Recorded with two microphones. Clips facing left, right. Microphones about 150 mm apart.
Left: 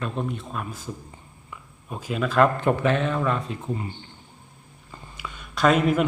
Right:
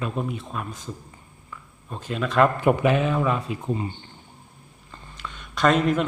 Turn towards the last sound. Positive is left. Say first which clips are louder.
# left 1 dB
turn(degrees=5)  # may be behind; listen again after turning